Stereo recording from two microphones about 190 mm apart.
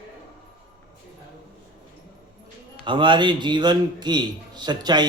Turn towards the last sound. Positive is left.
turn(degrees=-20)  # may be behind; listen again after turning